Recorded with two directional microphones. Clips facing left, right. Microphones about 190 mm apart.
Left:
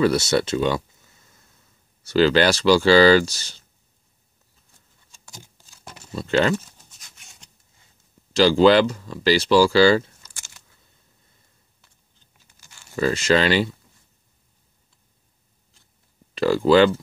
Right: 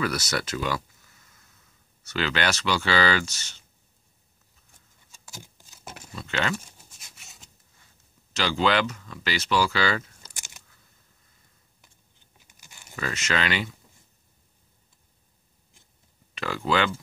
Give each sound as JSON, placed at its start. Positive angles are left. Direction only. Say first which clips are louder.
{"t": 0.0, "sound": "speech", "louder": "left 9 dB", "side_deg": 25}
{"t": 5.4, "sound": "a sound", "louder": "right 1 dB", "side_deg": -15}
{"t": 6.1, "sound": "speech", "louder": "left 10 dB", "side_deg": 35}
{"t": 7.0, "sound": "a sound", "louder": "even", "side_deg": -5}
{"t": 8.3, "sound": "speech", "louder": "left 10 dB", "side_deg": 35}
{"t": 10.3, "sound": "a sound", "louder": "right 2 dB", "side_deg": -15}
{"t": 12.4, "sound": "crunch", "louder": "even", "side_deg": -15}
{"t": 12.9, "sound": "speech", "louder": "left 10 dB", "side_deg": 35}
{"t": 16.3, "sound": "speech", "louder": "left 11 dB", "side_deg": 35}